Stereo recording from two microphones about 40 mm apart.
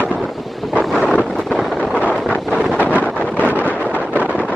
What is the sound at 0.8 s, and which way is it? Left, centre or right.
Wind noise, centre.